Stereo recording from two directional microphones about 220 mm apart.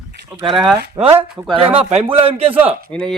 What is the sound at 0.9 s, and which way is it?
Speech, 25° right (ahead or behind).